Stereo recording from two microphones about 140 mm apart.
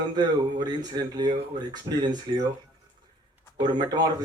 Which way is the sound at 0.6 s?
30° right (ahead or behind).